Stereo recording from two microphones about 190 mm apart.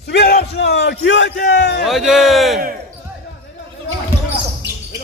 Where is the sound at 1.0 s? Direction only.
75° left (ahead or behind).